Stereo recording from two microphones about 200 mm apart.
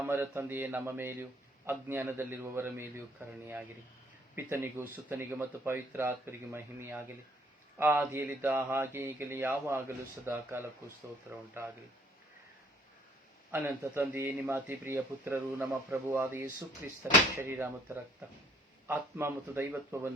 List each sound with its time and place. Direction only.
0.0 s speech: 10° right (ahead or behind)
13.5 s speech: 10° right (ahead or behind)